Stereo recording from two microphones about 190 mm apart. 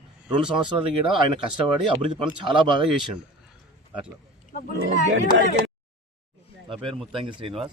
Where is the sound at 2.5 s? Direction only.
25° right (ahead or behind).